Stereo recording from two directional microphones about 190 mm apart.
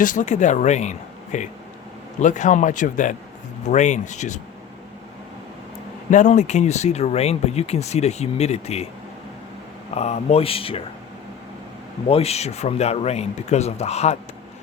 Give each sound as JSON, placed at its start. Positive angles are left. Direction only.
{"t": 0.0, "sound": "speech", "side_deg": 45}
{"t": 6.1, "sound": "speech", "side_deg": 40}
{"t": 9.9, "sound": "speech", "side_deg": 35}
{"t": 12.0, "sound": "speech", "side_deg": 30}